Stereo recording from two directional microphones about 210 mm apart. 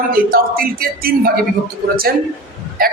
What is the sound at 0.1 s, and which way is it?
A man's voice, 45° right (ahead or behind).